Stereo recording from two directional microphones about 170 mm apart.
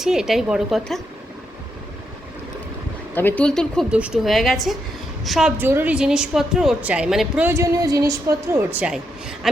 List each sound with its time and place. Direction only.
0.0 s a woman's voice: 5° right (ahead or behind)
3.2 s a woman's voice: 10° left (ahead or behind)
7.5 s speech: 20° right (ahead or behind)
8.5 s a woman's voice: 10° right (ahead or behind)